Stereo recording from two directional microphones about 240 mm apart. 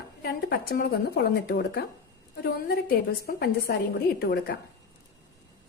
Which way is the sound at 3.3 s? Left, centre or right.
Left.